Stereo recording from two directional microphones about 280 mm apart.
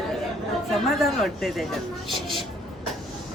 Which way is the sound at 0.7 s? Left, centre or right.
Centre.